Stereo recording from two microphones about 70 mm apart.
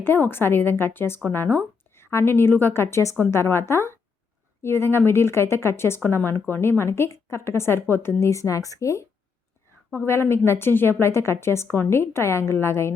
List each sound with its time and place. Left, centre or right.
0.0 s speech: left
2.0 s speech: left
10.1 s speech: left